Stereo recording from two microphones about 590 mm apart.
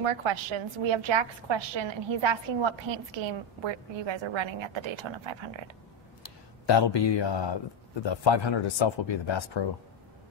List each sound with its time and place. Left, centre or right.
0.0 s a woman's voice: right
6.2 s speech: left